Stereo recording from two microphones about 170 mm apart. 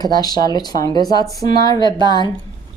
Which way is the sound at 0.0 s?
25° left (ahead or behind).